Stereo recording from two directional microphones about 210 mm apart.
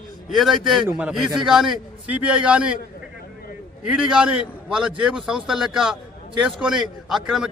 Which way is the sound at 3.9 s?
5° right (ahead or behind).